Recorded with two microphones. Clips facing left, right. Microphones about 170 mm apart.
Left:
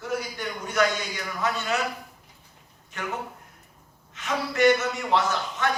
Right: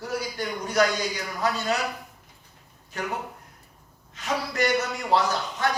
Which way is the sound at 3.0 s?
35° right (ahead or behind).